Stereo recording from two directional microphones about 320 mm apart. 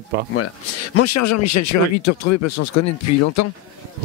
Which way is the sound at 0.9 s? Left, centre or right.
Left.